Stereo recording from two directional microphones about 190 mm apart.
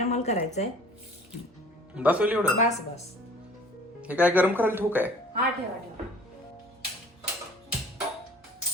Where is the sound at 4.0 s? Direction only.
5° right (ahead or behind).